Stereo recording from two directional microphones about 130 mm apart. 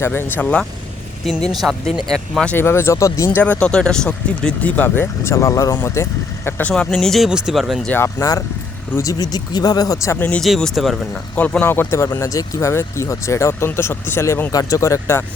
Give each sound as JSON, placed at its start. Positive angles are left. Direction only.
{"t": 0.0, "sound": "speech", "side_deg": 15}
{"t": 1.6, "sound": "speech", "side_deg": -10}
{"t": 2.0, "sound": "speech", "side_deg": 5}
{"t": 2.6, "sound": "speech", "side_deg": 20}
{"t": 7.9, "sound": "speech", "side_deg": 20}
{"t": 10.4, "sound": "speech", "side_deg": 0}
{"t": 11.3, "sound": "speech", "side_deg": 10}